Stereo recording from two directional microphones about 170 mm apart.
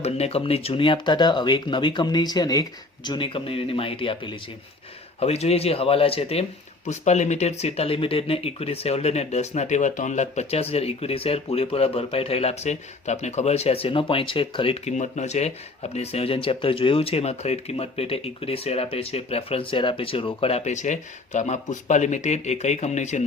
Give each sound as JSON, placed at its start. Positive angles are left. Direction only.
{"t": 0.0, "sound": "speech", "side_deg": 35}